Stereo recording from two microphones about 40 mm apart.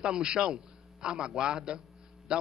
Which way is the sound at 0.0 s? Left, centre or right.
Right.